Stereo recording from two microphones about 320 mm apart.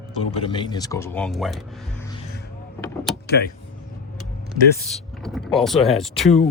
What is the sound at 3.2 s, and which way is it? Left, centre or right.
Speech, left.